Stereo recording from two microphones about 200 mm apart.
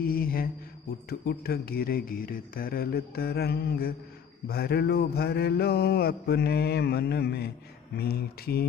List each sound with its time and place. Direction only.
0.0 s mantra: 45° left (ahead or behind)